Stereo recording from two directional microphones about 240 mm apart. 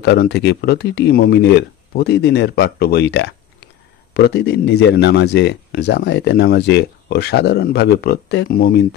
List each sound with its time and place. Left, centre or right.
0.0 s speech: left